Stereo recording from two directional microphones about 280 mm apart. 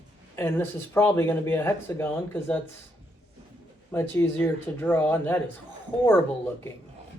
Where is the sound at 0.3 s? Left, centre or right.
Centre.